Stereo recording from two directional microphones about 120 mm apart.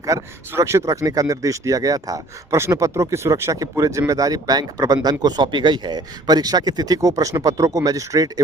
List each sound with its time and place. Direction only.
0.0 s speech: 25° right (ahead or behind)